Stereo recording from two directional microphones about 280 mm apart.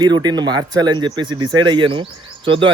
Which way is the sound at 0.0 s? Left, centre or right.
Centre.